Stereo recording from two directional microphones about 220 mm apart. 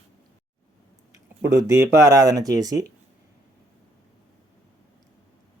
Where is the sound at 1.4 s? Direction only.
15° right (ahead or behind).